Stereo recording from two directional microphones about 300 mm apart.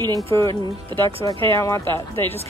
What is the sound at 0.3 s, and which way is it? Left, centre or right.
Speech, centre.